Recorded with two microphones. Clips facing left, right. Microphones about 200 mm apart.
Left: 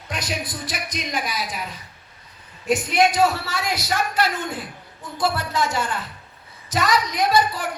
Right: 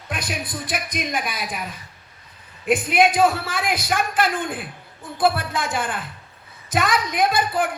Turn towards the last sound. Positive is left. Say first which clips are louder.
# even
turn(degrees=-55)  # may be behind; listen again after turning